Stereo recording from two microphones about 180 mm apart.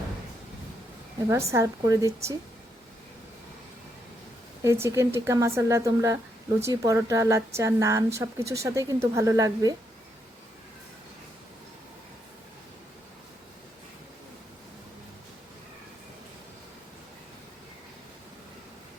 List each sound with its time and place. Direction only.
1.3 s a woman's voice: 15° right (ahead or behind)
4.6 s a woman's voice: 15° right (ahead or behind)